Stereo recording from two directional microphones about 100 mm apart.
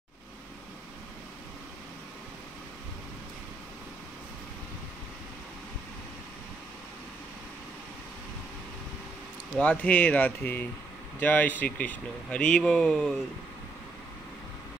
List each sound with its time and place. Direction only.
9.6 s speech: 15° left (ahead or behind)